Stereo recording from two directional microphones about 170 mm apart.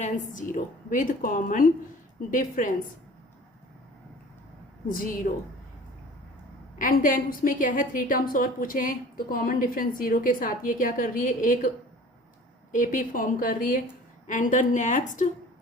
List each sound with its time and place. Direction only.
0.0 s a woman's voice: 50° left (ahead or behind)
4.9 s a woman's voice: 55° left (ahead or behind)
6.7 s a woman's voice: 50° left (ahead or behind)
12.7 s a woman's voice: 50° left (ahead or behind)